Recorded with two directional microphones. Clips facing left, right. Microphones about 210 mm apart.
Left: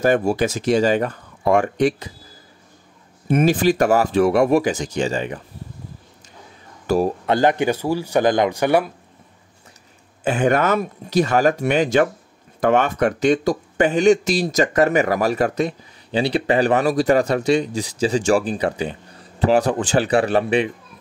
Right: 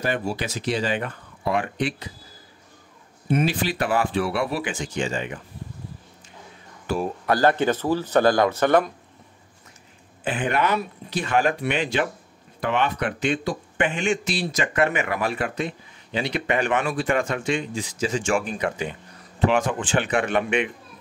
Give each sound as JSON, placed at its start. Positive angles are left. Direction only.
{"t": 0.0, "sound": "speech", "side_deg": 45}
{"t": 3.3, "sound": "speech", "side_deg": 45}
{"t": 6.9, "sound": "speech", "side_deg": 40}
{"t": 7.2, "sound": "speech", "side_deg": 20}
{"t": 10.2, "sound": "speech", "side_deg": 45}